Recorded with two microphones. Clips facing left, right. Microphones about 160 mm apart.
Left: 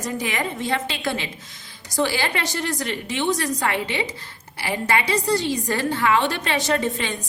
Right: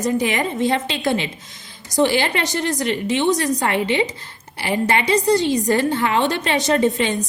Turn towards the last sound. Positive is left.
turn(degrees=-20)  # may be behind; listen again after turning